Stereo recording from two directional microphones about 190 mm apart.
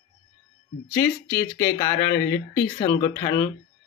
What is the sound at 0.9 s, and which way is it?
Speech, 15° left (ahead or behind).